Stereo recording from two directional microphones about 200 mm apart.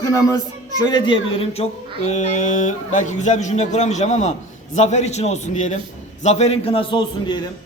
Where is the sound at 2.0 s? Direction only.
40° left (ahead or behind).